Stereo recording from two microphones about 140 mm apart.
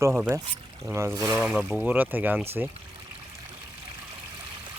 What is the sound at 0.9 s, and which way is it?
Speech, 20° right (ahead or behind).